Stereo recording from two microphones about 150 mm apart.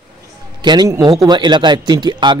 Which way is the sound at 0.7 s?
25° right (ahead or behind).